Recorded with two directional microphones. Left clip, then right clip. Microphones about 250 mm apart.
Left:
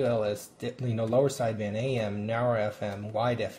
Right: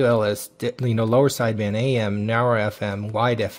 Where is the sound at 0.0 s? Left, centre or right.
Right.